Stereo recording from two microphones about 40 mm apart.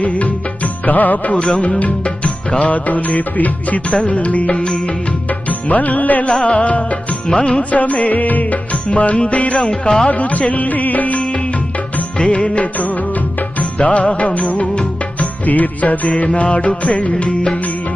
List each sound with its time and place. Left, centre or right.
0.0 s music: left
2.7 s music: left
3.9 s music: left
6.4 s music: left
7.3 s music: left
7.7 s music: left
8.7 s music: left
9.6 s music: left
10.1 s music: left